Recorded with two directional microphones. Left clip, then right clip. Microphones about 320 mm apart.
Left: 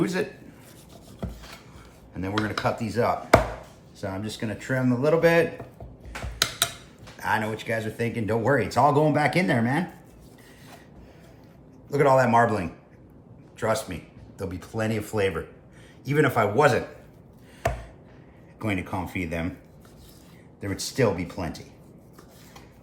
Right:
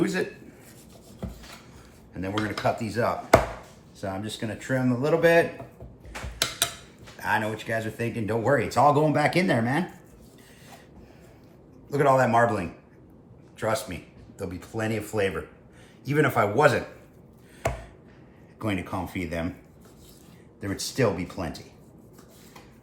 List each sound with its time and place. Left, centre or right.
0.0 s speech: centre
2.1 s speech: centre
7.2 s speech: centre
11.9 s speech: centre
17.6 s chopping: centre
18.6 s speech: centre
20.8 s speech: centre